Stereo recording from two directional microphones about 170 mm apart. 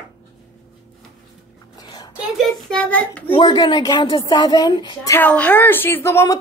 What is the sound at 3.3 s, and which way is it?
A woman's voice, 25° left (ahead or behind).